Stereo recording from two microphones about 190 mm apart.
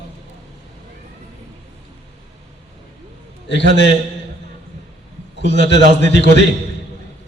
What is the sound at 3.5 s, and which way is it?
Speech, 65° left (ahead or behind).